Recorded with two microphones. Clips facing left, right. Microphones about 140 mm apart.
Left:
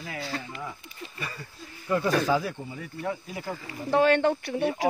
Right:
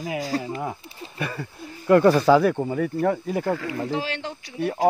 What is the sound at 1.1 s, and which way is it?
Speech, 60° right (ahead or behind).